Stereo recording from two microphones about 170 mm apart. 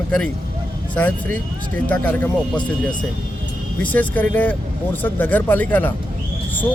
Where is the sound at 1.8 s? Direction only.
10° left (ahead or behind).